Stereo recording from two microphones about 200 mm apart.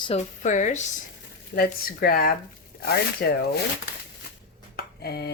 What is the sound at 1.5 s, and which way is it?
Speech, 50° left (ahead or behind).